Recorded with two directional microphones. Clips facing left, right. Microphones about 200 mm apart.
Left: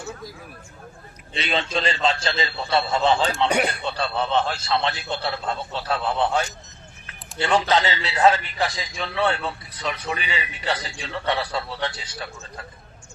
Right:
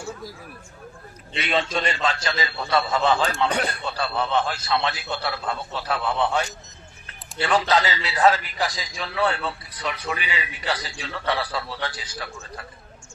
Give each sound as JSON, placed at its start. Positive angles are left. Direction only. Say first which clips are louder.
{"t": 1.4, "sound": "a man's voice", "louder": "right 1 dB", "side_deg": 25}
{"t": 8.3, "sound": "a man's voice", "louder": "left 1 dB", "side_deg": 0}
{"t": 8.6, "sound": "a man's voice", "louder": "left 2 dB", "side_deg": 25}